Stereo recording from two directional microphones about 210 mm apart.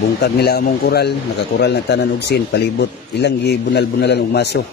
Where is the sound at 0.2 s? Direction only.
50° left (ahead or behind).